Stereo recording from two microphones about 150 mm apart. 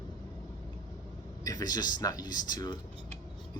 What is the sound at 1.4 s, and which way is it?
Speech, 25° left (ahead or behind).